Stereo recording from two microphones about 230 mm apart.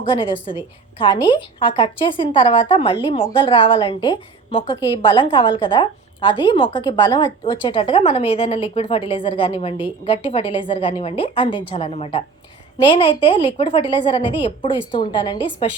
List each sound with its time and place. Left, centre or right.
0.1 s a woman's voice: left